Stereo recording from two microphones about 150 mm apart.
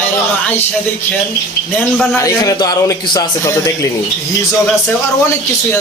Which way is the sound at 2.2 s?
25° left (ahead or behind).